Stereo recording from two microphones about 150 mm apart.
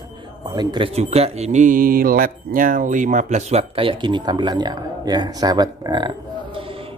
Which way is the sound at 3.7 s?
35° right (ahead or behind).